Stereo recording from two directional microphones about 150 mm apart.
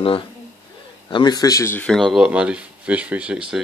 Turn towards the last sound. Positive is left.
turn(degrees=-5)  # may be behind; listen again after turning